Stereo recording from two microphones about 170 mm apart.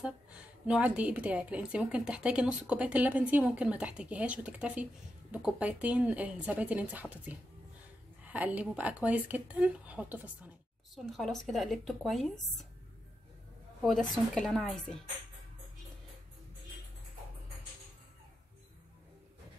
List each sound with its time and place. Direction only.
0.0 s a woman's voice: 5° right (ahead or behind)
11.0 s a woman's voice: centre (ahead or behind)
14.1 s a woman's voice: centre (ahead or behind)